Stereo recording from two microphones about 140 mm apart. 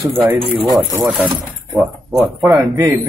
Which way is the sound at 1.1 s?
5° right (ahead or behind).